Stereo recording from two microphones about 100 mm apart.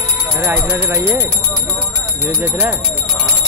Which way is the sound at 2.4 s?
20° right (ahead or behind).